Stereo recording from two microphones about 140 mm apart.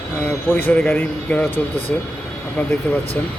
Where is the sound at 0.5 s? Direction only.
15° left (ahead or behind).